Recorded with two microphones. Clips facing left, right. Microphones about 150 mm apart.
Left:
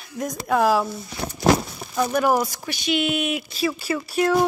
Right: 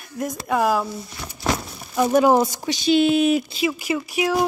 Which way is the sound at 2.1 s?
25° right (ahead or behind).